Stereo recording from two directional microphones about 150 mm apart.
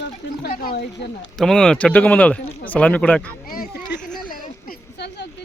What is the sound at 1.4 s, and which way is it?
Speech, 5° left (ahead or behind).